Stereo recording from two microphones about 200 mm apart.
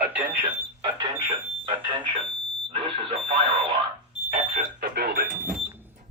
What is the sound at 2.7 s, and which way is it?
Speech, 25° right (ahead or behind).